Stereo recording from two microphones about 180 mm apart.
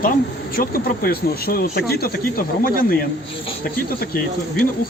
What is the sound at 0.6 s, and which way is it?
Speech, 55° left (ahead or behind).